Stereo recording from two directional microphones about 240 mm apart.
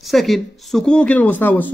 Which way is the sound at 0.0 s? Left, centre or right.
Centre.